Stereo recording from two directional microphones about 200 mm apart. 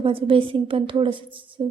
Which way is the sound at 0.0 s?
25° right (ahead or behind).